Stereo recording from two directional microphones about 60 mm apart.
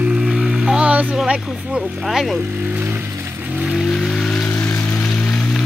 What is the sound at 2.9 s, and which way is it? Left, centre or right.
Music, right.